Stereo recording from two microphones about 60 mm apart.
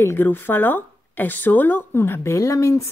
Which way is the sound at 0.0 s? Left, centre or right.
Left.